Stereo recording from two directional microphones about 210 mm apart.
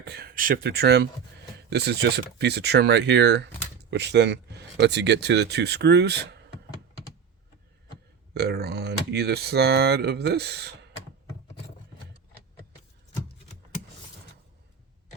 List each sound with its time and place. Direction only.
0.0 s speech: 50° right (ahead or behind)
8.3 s speech: 50° right (ahead or behind)